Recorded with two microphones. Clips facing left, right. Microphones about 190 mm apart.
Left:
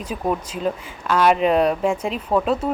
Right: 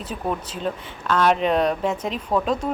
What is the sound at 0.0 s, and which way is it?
Speech, 10° left (ahead or behind).